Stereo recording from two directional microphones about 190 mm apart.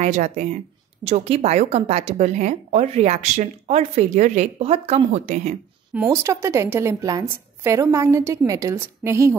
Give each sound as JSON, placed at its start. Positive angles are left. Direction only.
{"t": 0.0, "sound": "a woman's voice", "side_deg": -40}
{"t": 5.9, "sound": "a woman's voice", "side_deg": -15}